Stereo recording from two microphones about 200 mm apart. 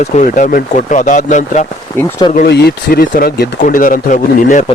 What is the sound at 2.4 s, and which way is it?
Speech, 50° left (ahead or behind).